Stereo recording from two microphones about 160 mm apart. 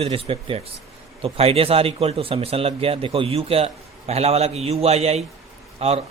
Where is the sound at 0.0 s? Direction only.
35° right (ahead or behind).